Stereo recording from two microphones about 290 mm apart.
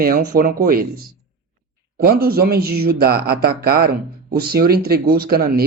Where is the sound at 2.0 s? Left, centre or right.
Right.